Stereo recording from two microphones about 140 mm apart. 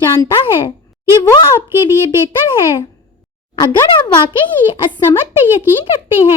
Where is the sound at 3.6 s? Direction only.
35° left (ahead or behind).